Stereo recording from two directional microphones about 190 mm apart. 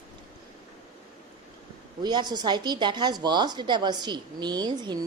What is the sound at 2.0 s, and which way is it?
Speech, 20° right (ahead or behind).